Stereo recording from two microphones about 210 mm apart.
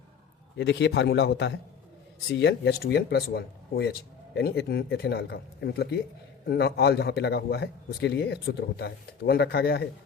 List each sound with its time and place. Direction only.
0.5 s a man's voice: 55° left (ahead or behind)